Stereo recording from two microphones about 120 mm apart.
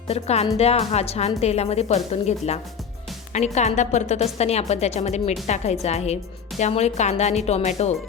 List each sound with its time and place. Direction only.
0.1 s a woman's voice: 60° left (ahead or behind)